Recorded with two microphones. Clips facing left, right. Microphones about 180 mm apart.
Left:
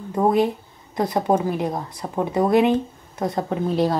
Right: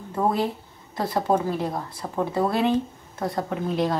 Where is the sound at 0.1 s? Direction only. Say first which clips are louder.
Left 5 dB; 20° left (ahead or behind).